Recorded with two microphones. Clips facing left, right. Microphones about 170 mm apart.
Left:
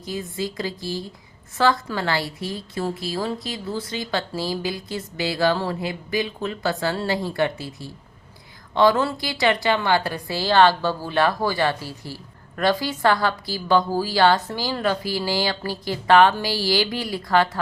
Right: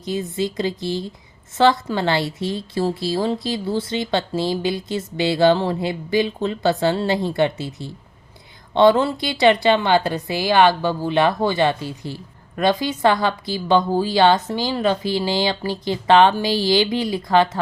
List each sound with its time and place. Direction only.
0.0 s a woman's voice: 25° right (ahead or behind)